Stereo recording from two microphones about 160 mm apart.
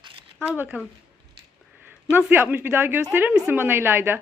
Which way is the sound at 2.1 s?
10° right (ahead or behind).